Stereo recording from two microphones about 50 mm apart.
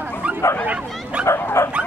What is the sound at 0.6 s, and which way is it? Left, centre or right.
Bow-wow, right.